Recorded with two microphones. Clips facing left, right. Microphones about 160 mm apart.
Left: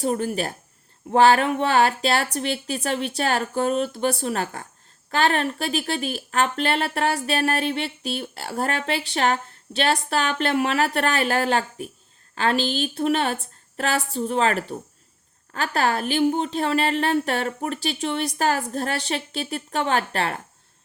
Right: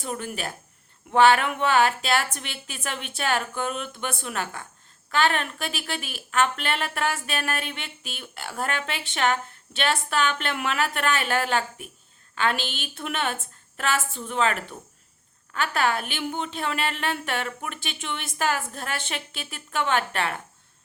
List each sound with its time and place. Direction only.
0.0 s speech: 35° left (ahead or behind)